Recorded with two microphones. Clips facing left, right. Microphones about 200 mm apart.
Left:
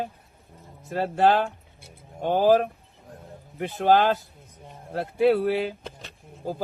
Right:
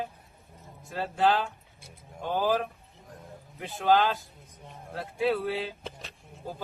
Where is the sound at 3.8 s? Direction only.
50° left (ahead or behind).